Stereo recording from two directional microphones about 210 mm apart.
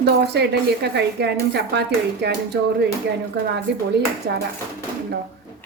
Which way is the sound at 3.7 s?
50° right (ahead or behind).